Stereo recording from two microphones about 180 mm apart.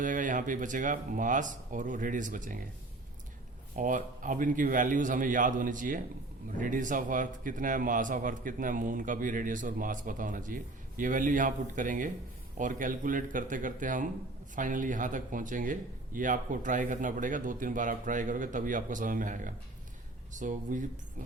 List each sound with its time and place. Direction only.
0.0 s a man's voice: 45° right (ahead or behind)
3.8 s a man's voice: 45° right (ahead or behind)